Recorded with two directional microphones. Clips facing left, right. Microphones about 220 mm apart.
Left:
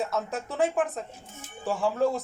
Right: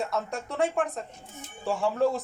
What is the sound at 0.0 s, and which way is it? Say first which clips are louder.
Speech: left 1 dB; centre (ahead or behind).